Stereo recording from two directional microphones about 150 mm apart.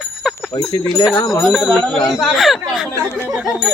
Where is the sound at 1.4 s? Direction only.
Centre (ahead or behind).